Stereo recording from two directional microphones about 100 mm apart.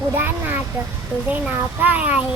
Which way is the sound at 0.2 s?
20° right (ahead or behind).